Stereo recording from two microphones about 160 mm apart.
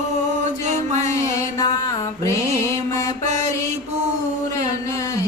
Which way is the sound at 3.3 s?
50° right (ahead or behind).